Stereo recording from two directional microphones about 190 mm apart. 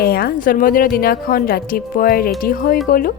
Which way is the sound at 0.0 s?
50° left (ahead or behind).